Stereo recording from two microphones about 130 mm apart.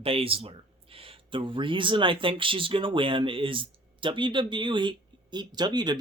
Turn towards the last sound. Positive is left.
turn(degrees=-35)  # may be behind; listen again after turning